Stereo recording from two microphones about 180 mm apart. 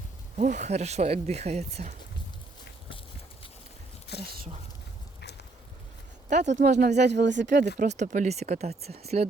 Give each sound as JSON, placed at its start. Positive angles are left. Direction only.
{"t": 0.3, "sound": "speech", "side_deg": -40}
{"t": 4.1, "sound": "a sound", "side_deg": 65}
{"t": 6.3, "sound": "speech", "side_deg": -40}
{"t": 7.0, "sound": "speech", "side_deg": -70}
{"t": 7.8, "sound": "speech", "side_deg": -45}